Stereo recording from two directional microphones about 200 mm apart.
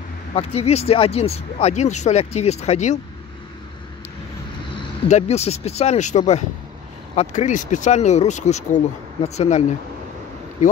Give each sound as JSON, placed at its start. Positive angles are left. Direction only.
{"t": 0.3, "sound": "speech", "side_deg": 30}
{"t": 4.7, "sound": "speech", "side_deg": 35}